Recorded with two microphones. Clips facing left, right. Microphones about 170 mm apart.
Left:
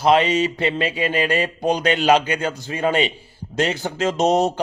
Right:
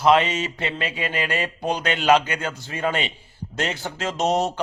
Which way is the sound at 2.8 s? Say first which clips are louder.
Left 5 dB; 20° left (ahead or behind).